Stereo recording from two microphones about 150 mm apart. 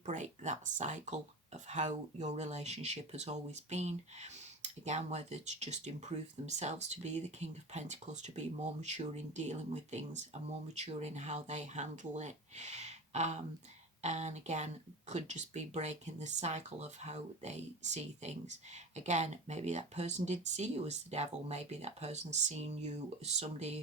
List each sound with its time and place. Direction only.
0.0 s speech: 55° right (ahead or behind)